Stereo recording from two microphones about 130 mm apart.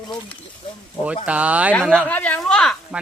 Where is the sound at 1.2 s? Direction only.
10° right (ahead or behind).